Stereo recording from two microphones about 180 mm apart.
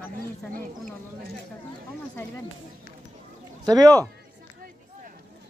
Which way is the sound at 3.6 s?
20° right (ahead or behind).